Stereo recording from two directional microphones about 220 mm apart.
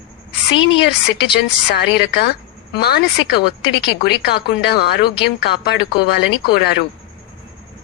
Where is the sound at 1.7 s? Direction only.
50° left (ahead or behind).